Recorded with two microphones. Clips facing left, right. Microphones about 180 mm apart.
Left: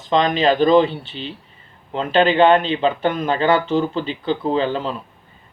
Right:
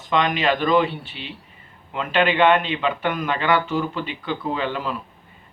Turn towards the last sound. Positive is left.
turn(degrees=30)  # may be behind; listen again after turning